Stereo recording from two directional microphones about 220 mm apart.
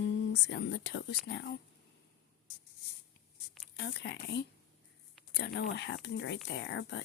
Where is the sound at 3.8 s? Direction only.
50° left (ahead or behind).